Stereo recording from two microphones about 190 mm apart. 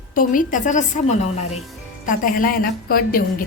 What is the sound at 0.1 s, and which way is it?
A woman's voice, 45° left (ahead or behind).